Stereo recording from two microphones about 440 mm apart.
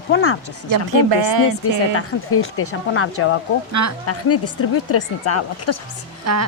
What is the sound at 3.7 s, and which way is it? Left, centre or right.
Speech, right.